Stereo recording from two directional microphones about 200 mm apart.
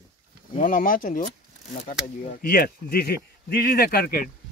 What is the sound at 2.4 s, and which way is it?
Speech, 50° left (ahead or behind).